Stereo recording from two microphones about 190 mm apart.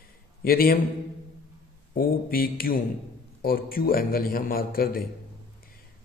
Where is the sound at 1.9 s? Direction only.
50° left (ahead or behind).